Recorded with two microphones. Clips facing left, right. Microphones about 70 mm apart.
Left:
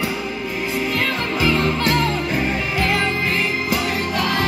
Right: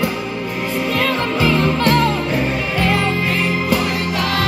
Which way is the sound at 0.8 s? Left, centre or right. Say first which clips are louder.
Right 3 dB; right.